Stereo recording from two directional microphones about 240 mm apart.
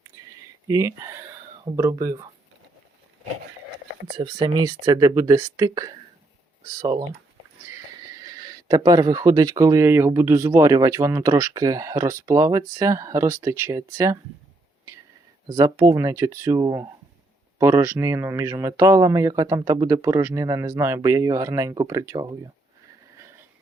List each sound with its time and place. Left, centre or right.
0.1 s a sound: centre
0.7 s speech: centre
4.2 s speech: centre
8.2 s speech: centre
15.4 s speech: centre